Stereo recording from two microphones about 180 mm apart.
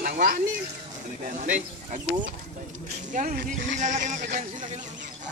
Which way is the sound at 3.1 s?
45° right (ahead or behind).